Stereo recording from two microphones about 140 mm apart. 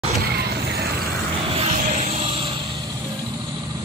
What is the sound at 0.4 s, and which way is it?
Mechanisms, 90° right.